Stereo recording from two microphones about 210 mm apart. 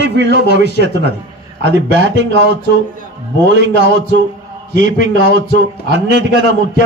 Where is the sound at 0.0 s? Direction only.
55° right (ahead or behind).